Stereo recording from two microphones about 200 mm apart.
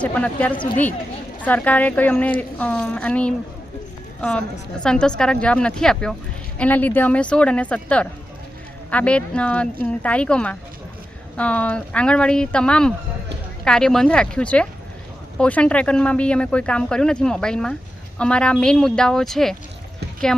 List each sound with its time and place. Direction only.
0.0 s speech: 5° left (ahead or behind)
0.5 s speech: 25° left (ahead or behind)
1.5 s a woman's voice: 5° left (ahead or behind)